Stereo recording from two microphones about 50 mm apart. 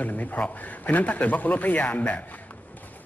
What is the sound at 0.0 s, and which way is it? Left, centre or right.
A man's voice, left.